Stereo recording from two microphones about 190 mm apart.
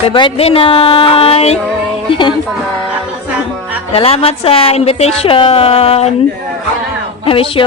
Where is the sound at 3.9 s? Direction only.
30° left (ahead or behind).